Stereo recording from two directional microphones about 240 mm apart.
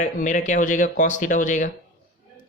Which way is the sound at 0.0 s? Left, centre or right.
Left.